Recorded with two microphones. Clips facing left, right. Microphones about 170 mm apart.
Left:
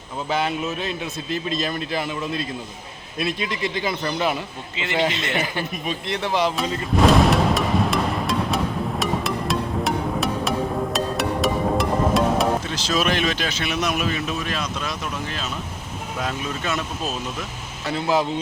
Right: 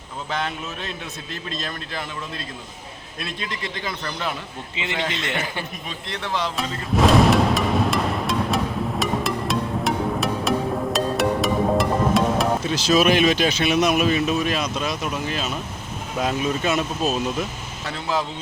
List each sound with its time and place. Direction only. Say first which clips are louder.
0.3 s a man's voice: left 5 dB; 5° left (ahead or behind)
6.6 s music: left 1 dB; centre (ahead or behind)
12.7 s speech: right 5 dB; 10° right (ahead or behind)
17.9 s a man's voice: left 4 dB; 10° left (ahead or behind)